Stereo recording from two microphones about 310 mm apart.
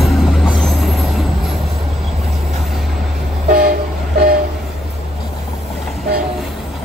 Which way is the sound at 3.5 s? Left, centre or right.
Right.